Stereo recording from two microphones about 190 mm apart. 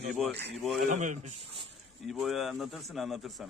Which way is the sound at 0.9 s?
40° right (ahead or behind).